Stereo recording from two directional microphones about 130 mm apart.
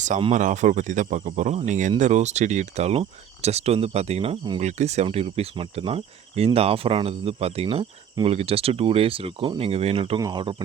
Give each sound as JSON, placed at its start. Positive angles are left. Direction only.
{"t": 0.3, "sound": "speech", "side_deg": -70}
{"t": 10.2, "sound": "speech", "side_deg": -35}